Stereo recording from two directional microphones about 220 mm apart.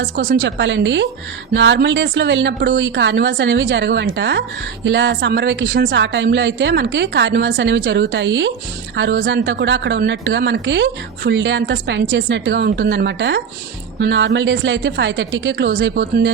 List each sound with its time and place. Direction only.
0.0 s speech: 55° right (ahead or behind)